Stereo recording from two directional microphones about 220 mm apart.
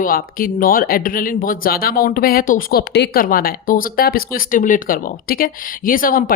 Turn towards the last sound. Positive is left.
turn(degrees=40)  # may be behind; listen again after turning